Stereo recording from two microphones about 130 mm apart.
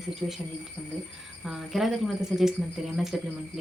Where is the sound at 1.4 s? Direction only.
Centre (ahead or behind).